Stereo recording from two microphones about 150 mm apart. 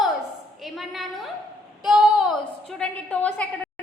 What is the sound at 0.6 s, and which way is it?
A woman's voice, centre (ahead or behind).